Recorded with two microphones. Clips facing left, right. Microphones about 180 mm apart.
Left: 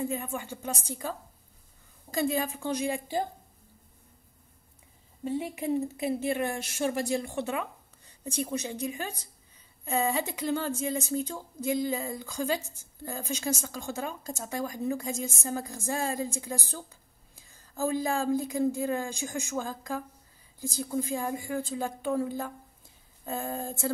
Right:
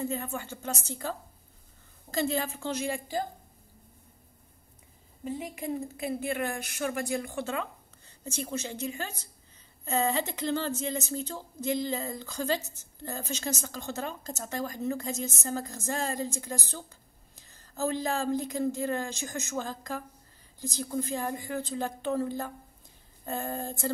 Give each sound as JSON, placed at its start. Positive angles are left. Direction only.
{"t": 0.0, "sound": "a woman's voice", "side_deg": 10}
{"t": 6.1, "sound": "a woman's voice", "side_deg": 20}